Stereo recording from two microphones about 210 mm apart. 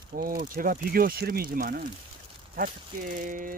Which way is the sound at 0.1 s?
40° right (ahead or behind).